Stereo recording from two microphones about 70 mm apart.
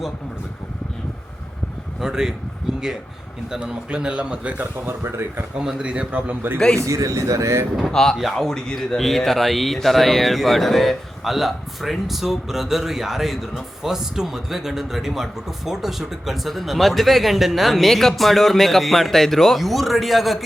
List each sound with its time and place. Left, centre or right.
2.0 s a man's voice: centre
3.5 s a man's voice: centre
4.9 s speech: right
5.5 s a man's voice: centre
6.7 s speech: right
7.8 s speech: centre